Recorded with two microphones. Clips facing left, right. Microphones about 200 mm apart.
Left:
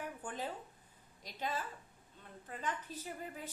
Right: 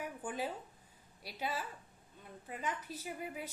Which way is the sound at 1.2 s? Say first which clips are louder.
Even; 10° right (ahead or behind).